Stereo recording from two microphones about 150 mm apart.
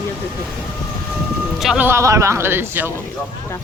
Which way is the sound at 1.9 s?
20° right (ahead or behind).